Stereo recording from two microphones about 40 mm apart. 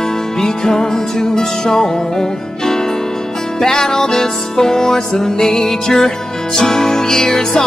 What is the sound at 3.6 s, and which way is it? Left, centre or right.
Music, centre.